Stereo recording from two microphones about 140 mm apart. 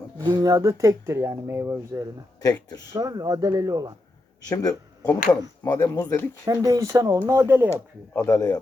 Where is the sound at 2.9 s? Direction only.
25° right (ahead or behind).